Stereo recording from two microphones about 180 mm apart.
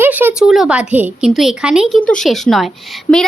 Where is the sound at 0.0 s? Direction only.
10° right (ahead or behind).